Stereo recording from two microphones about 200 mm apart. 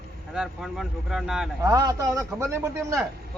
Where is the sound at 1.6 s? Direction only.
15° right (ahead or behind).